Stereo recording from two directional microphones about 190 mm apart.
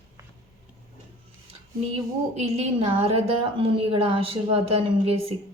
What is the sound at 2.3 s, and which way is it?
A woman's voice, 35° right (ahead or behind).